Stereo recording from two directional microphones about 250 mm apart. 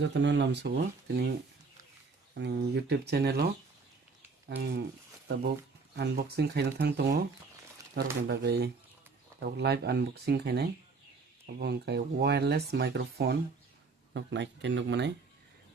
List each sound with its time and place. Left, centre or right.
0.0 s speech: right
2.3 s speech: right
4.4 s speech: right
6.0 s speech: right
8.3 s speech: right